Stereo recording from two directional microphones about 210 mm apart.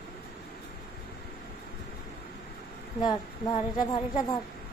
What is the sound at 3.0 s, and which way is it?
A woman's voice, 20° left (ahead or behind).